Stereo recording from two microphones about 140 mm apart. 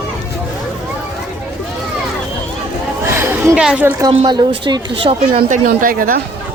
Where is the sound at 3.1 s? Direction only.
15° right (ahead or behind).